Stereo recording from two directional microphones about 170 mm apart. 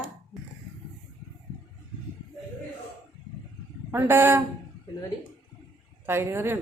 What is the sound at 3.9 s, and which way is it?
Speech, 15° right (ahead or behind).